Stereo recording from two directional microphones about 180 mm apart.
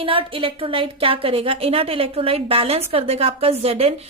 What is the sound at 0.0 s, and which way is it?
A woman's voice, 30° right (ahead or behind).